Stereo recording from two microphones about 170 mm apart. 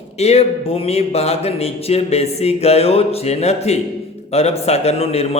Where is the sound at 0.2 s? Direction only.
40° left (ahead or behind).